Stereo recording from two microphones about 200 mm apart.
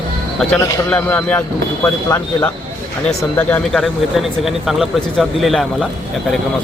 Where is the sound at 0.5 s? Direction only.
15° left (ahead or behind).